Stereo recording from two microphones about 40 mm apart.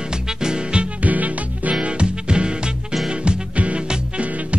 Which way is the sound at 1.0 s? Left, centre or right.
Right.